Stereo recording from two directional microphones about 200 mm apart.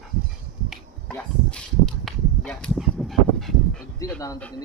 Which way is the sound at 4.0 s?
10° left (ahead or behind).